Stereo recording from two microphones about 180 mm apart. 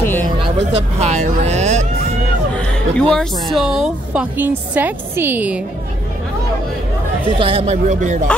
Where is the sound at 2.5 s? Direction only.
5° left (ahead or behind).